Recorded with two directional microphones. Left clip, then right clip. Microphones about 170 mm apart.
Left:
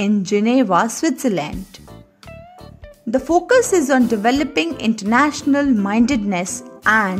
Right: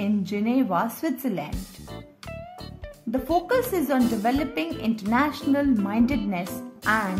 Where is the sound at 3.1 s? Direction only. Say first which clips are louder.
Left 9 dB; 35° left (ahead or behind).